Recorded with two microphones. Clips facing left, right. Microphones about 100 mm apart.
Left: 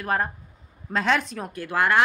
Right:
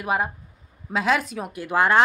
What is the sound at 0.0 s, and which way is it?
A woman's voice, 10° right (ahead or behind).